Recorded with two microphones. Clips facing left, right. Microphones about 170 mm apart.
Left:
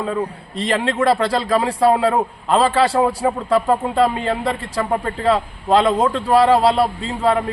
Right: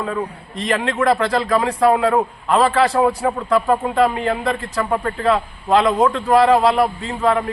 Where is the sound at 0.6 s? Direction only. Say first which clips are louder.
Left 1 dB; 30° left (ahead or behind).